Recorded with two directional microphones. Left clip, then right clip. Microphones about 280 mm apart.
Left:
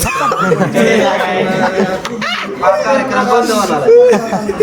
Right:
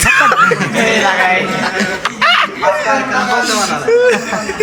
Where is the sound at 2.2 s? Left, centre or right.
Centre.